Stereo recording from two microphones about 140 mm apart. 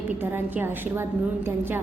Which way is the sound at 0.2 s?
15° right (ahead or behind).